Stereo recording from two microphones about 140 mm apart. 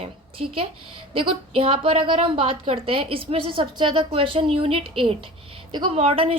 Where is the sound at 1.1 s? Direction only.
40° right (ahead or behind).